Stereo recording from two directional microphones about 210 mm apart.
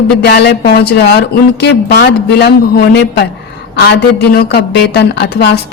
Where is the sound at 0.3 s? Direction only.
55° left (ahead or behind).